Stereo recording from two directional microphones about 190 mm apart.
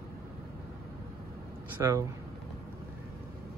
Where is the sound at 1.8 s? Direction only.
15° right (ahead or behind).